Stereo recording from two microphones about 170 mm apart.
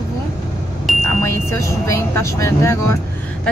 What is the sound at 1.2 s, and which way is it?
Speech, 15° left (ahead or behind).